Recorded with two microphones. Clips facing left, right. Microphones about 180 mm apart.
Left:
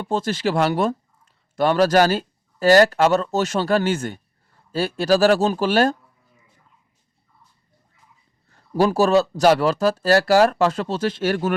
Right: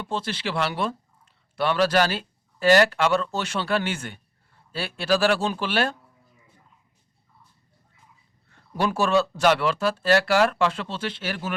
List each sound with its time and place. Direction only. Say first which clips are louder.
0.0 s speech: left 7 dB; 45° left (ahead or behind)
8.4 s speech: left 7 dB; 35° left (ahead or behind)